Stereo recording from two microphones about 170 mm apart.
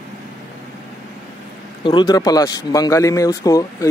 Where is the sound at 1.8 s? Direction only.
25° left (ahead or behind).